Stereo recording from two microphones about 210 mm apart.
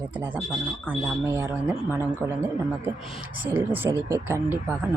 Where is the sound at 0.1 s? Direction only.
10° right (ahead or behind).